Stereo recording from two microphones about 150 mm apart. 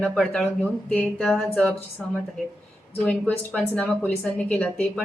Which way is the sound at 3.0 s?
5° left (ahead or behind).